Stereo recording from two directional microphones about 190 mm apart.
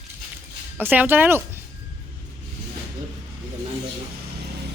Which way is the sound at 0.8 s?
10° right (ahead or behind).